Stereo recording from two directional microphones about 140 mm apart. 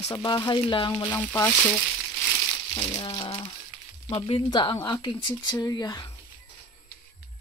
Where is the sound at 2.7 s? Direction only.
30° left (ahead or behind).